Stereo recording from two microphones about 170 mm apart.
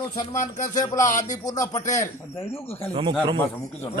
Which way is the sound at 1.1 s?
50° left (ahead or behind).